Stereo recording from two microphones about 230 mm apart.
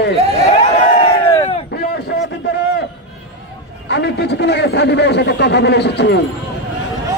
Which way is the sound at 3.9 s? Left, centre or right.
Left.